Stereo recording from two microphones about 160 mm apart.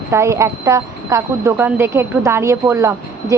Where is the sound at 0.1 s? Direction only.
20° right (ahead or behind).